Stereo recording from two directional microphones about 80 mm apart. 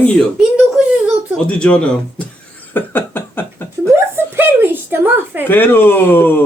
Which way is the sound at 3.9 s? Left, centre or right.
Right.